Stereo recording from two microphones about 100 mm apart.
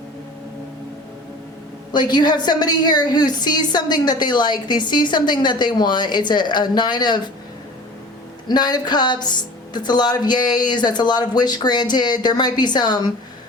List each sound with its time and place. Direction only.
1.9 s a woman's voice: 50° left (ahead or behind)
8.4 s a woman's voice: 45° left (ahead or behind)